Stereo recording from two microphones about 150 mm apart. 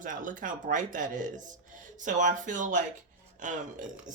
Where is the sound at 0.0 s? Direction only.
60° right (ahead or behind).